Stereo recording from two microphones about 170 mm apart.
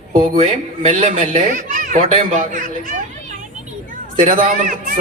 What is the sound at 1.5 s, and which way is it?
A child's voice, 50° right (ahead or behind).